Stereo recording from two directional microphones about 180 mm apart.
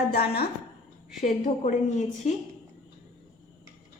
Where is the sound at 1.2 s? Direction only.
40° left (ahead or behind).